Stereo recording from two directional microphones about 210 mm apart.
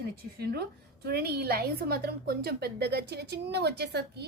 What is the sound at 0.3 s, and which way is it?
A woman's voice, 45° right (ahead or behind).